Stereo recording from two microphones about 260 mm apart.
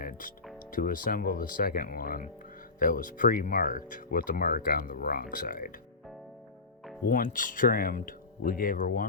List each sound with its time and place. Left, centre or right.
0.0 s music: left
0.7 s speech: left
7.1 s speech: left